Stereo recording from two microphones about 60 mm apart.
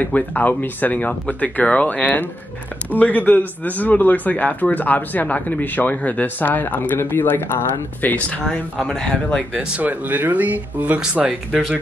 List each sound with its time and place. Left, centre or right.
0.0 s speech: left
8.8 s speech: centre
9.8 s speech: right